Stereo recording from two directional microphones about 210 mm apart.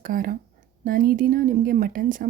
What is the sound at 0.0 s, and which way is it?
Speech, 40° right (ahead or behind).